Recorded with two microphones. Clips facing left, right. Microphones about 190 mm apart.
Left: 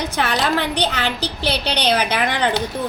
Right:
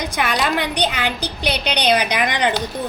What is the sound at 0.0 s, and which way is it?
A woman's voice, 15° right (ahead or behind).